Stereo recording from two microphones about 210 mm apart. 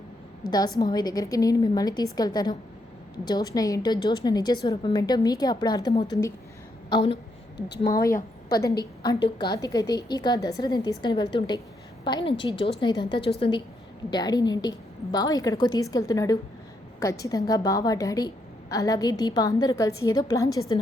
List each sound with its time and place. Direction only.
0.4 s a woman's voice: 20° left (ahead or behind)
8.1 s a woman's voice: 45° left (ahead or behind)
8.8 s a woman's voice: 20° left (ahead or behind)